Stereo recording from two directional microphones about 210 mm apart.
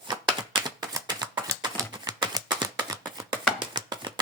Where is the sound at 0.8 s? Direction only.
20° right (ahead or behind).